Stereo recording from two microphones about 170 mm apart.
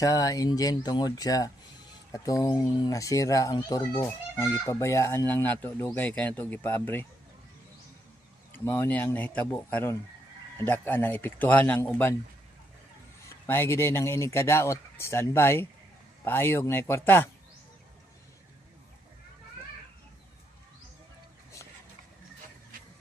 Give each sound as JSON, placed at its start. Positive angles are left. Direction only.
{"t": 0.0, "sound": "a child's voice", "side_deg": 20}
{"t": 8.5, "sound": "a child's voice", "side_deg": 10}
{"t": 13.5, "sound": "a child's voice", "side_deg": 15}